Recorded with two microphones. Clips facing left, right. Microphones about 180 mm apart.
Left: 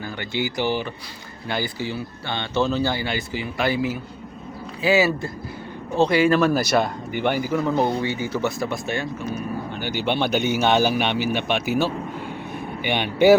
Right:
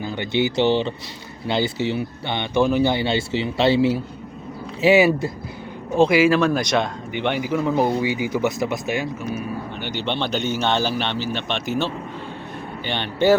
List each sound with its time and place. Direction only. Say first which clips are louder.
0.0 s speech: right 5 dB; 20° right (ahead or behind)
4.8 s speech: right 4 dB; 20° right (ahead or behind)
6.0 s speech: right 2 dB; 5° right (ahead or behind)
9.7 s speech: left 3 dB; 5° left (ahead or behind)